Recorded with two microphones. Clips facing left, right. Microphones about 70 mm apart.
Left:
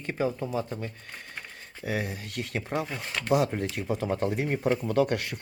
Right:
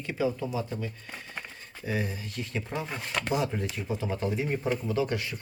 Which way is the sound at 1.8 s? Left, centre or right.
Left.